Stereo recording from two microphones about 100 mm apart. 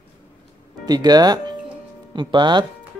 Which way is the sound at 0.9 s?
40° right (ahead or behind).